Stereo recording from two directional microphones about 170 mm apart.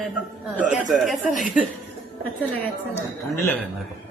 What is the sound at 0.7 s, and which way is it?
Speech, centre (ahead or behind).